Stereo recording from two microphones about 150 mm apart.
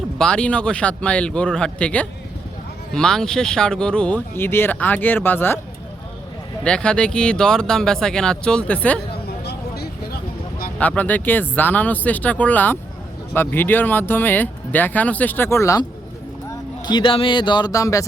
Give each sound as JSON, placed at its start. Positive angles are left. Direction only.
{"t": 0.2, "sound": "speech", "side_deg": 5}
{"t": 6.7, "sound": "speech", "side_deg": 5}
{"t": 9.4, "sound": "a sound", "side_deg": 90}
{"t": 10.8, "sound": "speech", "side_deg": 10}
{"t": 16.8, "sound": "speech", "side_deg": 35}